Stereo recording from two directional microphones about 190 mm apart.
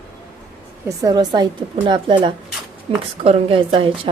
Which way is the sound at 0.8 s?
20° right (ahead or behind).